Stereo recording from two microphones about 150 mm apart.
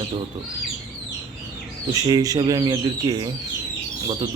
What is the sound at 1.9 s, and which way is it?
Speech, 25° right (ahead or behind).